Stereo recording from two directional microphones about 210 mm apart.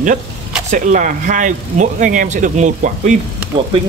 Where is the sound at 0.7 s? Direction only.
40° right (ahead or behind).